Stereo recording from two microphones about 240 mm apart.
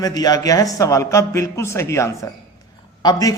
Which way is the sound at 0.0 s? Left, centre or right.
Centre.